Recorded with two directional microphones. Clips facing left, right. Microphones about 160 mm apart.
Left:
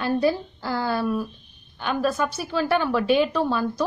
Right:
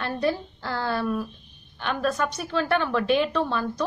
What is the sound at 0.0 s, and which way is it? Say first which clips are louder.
A woman's voice: left 4 dB; 5° left (ahead or behind).